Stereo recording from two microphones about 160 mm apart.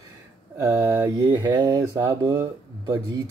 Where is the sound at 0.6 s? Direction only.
15° right (ahead or behind).